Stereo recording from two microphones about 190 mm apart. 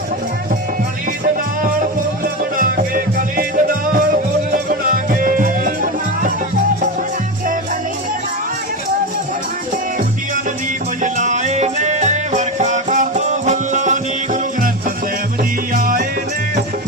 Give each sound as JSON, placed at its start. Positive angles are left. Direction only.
{"t": 2.2, "sound": "music", "side_deg": -50}
{"t": 11.0, "sound": "music", "side_deg": -40}